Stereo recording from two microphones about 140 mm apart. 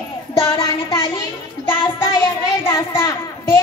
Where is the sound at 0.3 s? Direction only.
20° left (ahead or behind).